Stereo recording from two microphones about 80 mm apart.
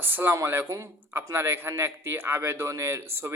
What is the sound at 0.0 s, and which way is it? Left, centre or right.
A man's voice, right.